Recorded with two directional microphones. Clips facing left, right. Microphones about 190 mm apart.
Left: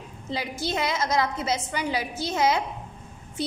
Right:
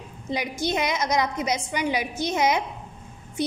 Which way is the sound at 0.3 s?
20° right (ahead or behind).